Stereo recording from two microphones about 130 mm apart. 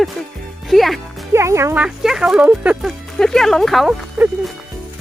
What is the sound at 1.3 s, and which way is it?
Speech, 20° right (ahead or behind).